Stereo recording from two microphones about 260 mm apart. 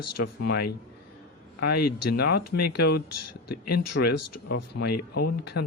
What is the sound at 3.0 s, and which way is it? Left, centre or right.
Speech, left.